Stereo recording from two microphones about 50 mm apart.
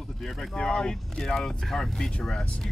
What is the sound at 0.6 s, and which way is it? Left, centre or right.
Speech, centre.